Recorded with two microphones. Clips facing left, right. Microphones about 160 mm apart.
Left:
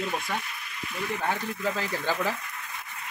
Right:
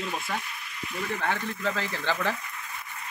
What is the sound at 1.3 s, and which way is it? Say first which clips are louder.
Speech: even; 10° left (ahead or behind).